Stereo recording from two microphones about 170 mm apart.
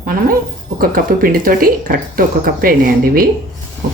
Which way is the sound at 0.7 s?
60° right (ahead or behind).